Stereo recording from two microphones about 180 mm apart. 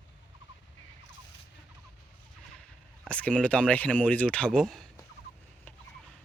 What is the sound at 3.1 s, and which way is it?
Speech, 5° left (ahead or behind).